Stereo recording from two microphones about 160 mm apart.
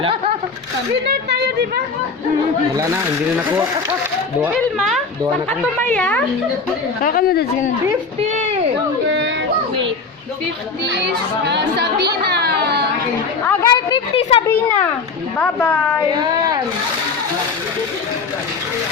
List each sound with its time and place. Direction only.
1.0 s speech: 85° right
2.7 s speech: 20° right (ahead or behind)
4.4 s speech: centre (ahead or behind)
7.0 s a woman's voice: 65° left (ahead or behind)
10.8 s a child's voice: 90° right
13.4 s speech: 10° left (ahead or behind)
13.7 s speech: 30° left (ahead or behind)
14.4 s speech: 10° left (ahead or behind)